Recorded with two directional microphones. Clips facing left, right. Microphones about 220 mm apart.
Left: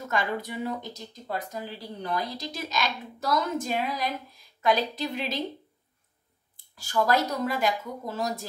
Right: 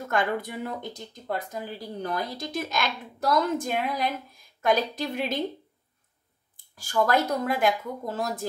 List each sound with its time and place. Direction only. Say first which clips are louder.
0.1 s a woman's voice: right 2 dB; 55° right (ahead or behind)
2.1 s a woman's voice: even; 50° right (ahead or behind)
6.8 s a woman's voice: right 1 dB; 50° right (ahead or behind)